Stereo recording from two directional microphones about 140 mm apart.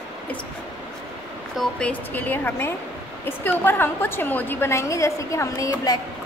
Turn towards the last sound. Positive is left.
turn(degrees=20)  # may be behind; listen again after turning